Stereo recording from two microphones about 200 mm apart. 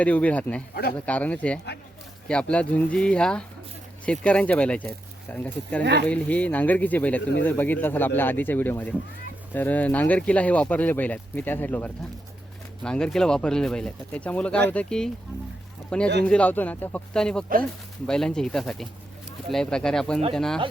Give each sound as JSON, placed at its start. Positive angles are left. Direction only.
{"t": 0.0, "sound": "speech", "side_deg": 5}
{"t": 0.7, "sound": "speech", "side_deg": 50}
{"t": 0.9, "sound": "speech", "side_deg": 5}
{"t": 16.2, "sound": "speech", "side_deg": 5}